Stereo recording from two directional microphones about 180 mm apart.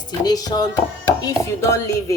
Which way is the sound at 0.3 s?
20° left (ahead or behind).